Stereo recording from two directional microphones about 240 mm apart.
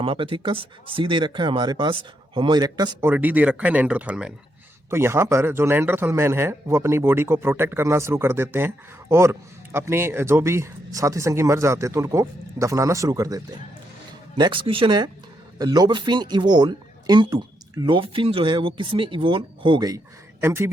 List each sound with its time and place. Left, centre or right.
0.0 s speech: right